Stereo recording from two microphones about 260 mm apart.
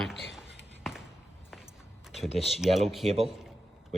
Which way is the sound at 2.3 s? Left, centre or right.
Centre.